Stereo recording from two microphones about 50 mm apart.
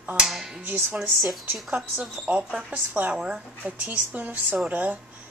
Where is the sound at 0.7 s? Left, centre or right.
Right.